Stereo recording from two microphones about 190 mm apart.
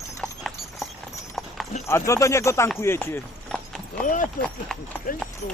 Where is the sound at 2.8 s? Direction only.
10° left (ahead or behind).